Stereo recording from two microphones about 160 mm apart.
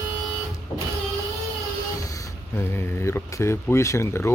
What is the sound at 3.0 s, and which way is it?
Speech, 15° left (ahead or behind).